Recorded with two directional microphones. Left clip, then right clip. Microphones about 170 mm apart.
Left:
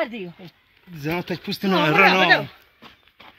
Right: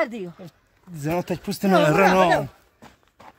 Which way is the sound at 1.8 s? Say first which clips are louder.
Left 3 dB; 90° right.